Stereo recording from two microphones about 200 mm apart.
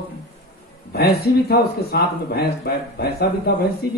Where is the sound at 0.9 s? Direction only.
50° left (ahead or behind).